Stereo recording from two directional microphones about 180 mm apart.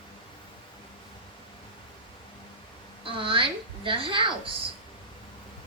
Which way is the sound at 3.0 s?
30° right (ahead or behind).